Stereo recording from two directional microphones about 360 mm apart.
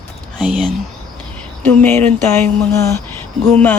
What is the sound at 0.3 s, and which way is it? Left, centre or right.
Speech, centre.